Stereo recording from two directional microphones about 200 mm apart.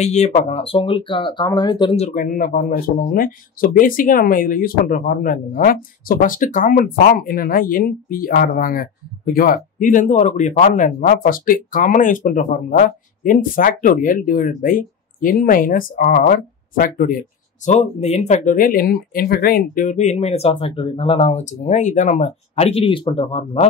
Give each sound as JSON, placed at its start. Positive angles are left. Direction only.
{"t": 0.0, "sound": "speech", "side_deg": 35}
{"t": 2.0, "sound": "speech", "side_deg": 40}
{"t": 17.6, "sound": "speech", "side_deg": 35}